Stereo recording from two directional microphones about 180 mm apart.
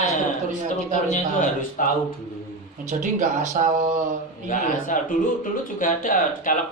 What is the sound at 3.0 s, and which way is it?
Speech, 45° right (ahead or behind).